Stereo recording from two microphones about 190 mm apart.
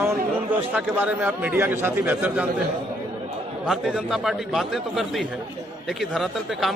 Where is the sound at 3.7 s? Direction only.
Centre (ahead or behind).